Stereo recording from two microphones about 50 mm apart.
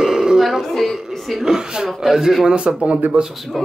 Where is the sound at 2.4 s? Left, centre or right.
Centre.